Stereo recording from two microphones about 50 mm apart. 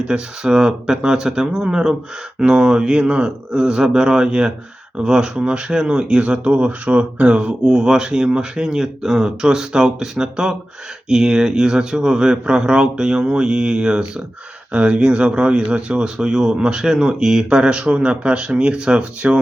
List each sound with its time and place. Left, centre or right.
0.0 s speech: centre
7.6 s speech: centre